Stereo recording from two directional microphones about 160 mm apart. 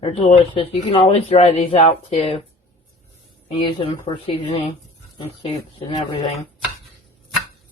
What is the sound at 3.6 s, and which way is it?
Speech, 35° left (ahead or behind).